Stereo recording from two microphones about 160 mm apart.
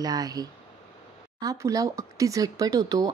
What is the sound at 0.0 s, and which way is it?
A woman's voice, 25° right (ahead or behind).